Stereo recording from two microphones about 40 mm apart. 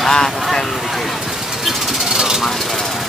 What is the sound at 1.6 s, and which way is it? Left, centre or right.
Jackhammer, centre.